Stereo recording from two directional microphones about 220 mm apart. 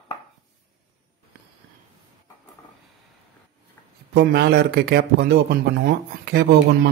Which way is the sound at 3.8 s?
10° left (ahead or behind).